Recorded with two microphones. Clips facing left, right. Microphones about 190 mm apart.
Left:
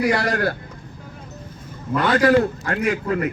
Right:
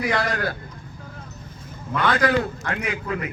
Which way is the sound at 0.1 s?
45° left (ahead or behind).